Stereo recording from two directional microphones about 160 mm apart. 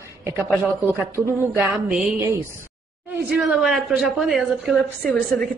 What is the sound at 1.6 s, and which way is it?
Speech, 5° right (ahead or behind).